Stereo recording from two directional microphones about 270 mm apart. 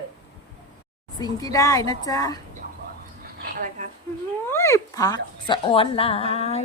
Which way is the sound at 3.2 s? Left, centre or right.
Right.